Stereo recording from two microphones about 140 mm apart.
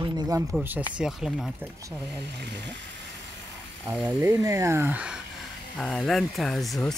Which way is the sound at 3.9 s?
10° right (ahead or behind).